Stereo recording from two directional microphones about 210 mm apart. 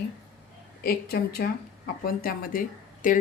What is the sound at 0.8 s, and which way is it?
A woman's voice, 45° left (ahead or behind).